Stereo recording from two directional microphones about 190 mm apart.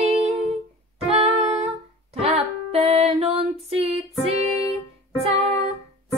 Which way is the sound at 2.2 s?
30° right (ahead or behind).